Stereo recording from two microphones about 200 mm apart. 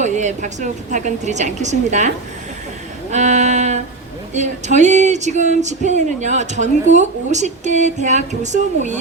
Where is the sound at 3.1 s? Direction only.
35° right (ahead or behind).